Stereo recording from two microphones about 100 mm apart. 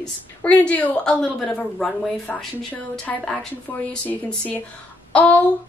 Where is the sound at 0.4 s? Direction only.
15° left (ahead or behind).